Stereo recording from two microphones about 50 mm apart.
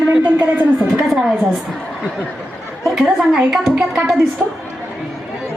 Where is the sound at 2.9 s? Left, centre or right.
Centre.